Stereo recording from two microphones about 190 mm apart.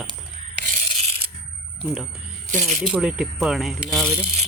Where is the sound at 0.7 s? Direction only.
40° right (ahead or behind).